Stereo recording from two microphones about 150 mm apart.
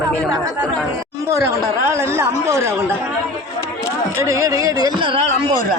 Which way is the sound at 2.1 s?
20° right (ahead or behind).